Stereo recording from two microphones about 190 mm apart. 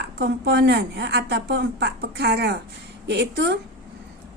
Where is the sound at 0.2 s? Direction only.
60° right (ahead or behind).